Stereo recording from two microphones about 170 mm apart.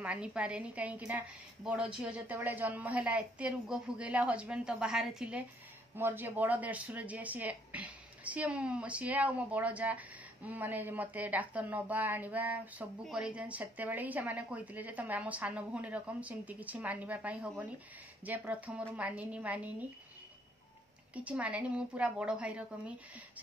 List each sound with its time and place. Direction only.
0.0 s speech: 5° right (ahead or behind)
21.1 s speech: 10° right (ahead or behind)